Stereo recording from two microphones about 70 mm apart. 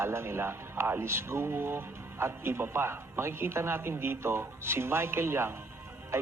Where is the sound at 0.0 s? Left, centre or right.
Right.